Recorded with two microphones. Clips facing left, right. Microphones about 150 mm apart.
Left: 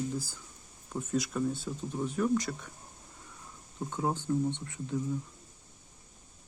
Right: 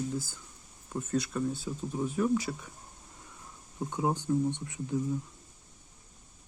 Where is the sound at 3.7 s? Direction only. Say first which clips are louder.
Right 2 dB; 15° right (ahead or behind).